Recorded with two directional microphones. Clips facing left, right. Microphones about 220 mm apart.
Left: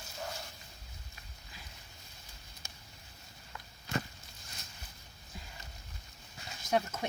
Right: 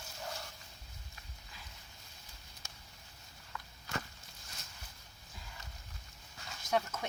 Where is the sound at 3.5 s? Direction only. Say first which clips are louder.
Left 5 dB; 20° left (ahead or behind).